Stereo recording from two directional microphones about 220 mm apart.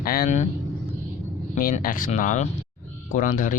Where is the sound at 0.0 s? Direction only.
40° left (ahead or behind).